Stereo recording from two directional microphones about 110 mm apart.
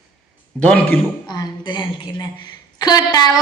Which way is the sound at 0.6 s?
10° left (ahead or behind).